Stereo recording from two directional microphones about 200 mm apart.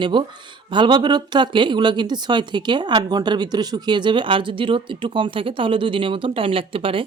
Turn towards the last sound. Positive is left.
turn(degrees=-25)  # may be behind; listen again after turning